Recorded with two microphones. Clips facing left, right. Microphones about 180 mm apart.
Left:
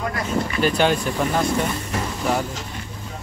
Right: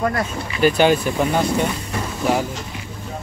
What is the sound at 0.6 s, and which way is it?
Speech, 5° right (ahead or behind).